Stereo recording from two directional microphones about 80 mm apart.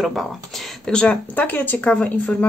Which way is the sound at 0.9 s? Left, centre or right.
Centre.